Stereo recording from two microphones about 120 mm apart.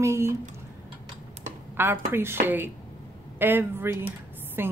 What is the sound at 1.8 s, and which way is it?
Speech, 20° right (ahead or behind).